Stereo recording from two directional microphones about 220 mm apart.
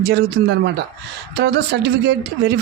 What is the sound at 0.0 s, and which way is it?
Speech, 45° right (ahead or behind).